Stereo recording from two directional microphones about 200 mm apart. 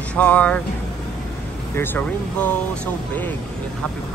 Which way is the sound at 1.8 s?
10° left (ahead or behind).